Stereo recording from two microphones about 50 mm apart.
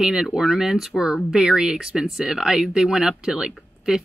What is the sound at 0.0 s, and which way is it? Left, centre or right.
Speech, centre.